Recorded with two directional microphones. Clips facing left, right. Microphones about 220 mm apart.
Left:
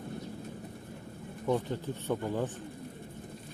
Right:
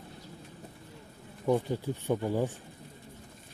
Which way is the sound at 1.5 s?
15° right (ahead or behind).